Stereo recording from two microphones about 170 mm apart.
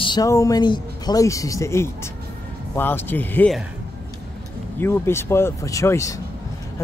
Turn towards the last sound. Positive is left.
turn(degrees=15)  # may be behind; listen again after turning